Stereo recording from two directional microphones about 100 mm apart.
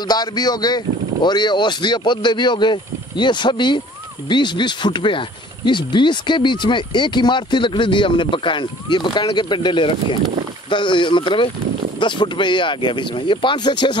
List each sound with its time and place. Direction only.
0.1 s speech: 45° left (ahead or behind)